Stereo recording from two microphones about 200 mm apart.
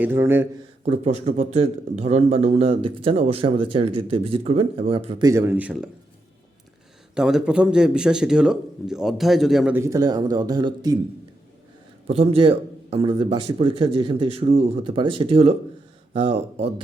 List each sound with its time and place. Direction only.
0.0 s a man's voice: 10° right (ahead or behind)
0.9 s speech: 30° right (ahead or behind)
5.2 s a man's voice: 15° right (ahead or behind)
7.1 s a man's voice: 5° right (ahead or behind); by 10.9 s 20° right (ahead or behind)
12.0 s speech: 30° right (ahead or behind)